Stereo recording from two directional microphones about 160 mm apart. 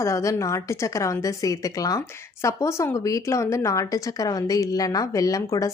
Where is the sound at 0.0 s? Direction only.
20° left (ahead or behind).